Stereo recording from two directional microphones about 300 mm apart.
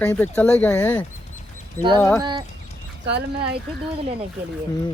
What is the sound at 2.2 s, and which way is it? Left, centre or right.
Speech, centre.